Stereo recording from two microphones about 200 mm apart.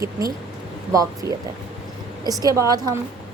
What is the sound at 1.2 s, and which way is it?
A woman's voice, 15° right (ahead or behind).